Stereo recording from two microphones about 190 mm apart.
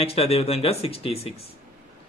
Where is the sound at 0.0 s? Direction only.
30° left (ahead or behind).